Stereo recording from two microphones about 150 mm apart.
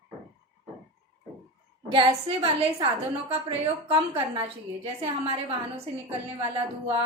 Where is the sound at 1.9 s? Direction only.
35° right (ahead or behind).